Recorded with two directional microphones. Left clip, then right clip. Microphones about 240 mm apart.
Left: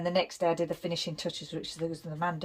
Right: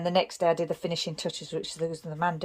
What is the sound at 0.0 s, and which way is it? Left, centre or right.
Speech, centre.